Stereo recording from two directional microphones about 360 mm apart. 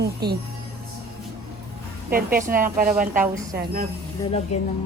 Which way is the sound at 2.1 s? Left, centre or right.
Right.